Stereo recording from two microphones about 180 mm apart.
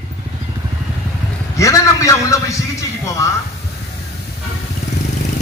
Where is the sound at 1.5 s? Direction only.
15° left (ahead or behind).